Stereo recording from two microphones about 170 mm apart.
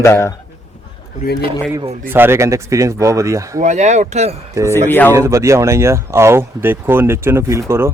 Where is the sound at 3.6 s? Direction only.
45° right (ahead or behind).